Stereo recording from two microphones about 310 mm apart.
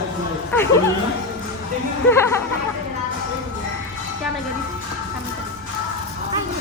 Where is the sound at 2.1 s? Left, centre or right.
Centre.